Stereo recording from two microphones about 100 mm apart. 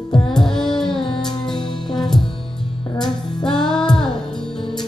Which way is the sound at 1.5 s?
5° left (ahead or behind).